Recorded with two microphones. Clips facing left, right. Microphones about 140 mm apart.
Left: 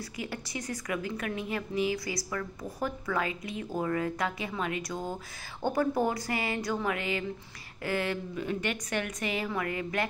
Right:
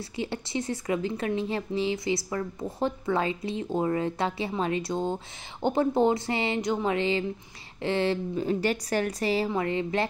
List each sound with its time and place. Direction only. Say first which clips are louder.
0.1 s a woman's voice: right 10 dB; 25° right (ahead or behind)